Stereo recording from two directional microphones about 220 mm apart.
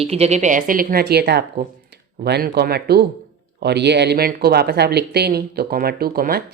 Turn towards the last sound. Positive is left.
turn(degrees=-45)  # may be behind; listen again after turning